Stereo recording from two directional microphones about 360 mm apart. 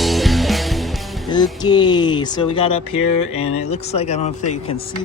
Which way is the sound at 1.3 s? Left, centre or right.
Centre.